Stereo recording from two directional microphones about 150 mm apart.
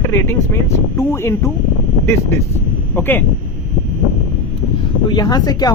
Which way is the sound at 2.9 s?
15° left (ahead or behind).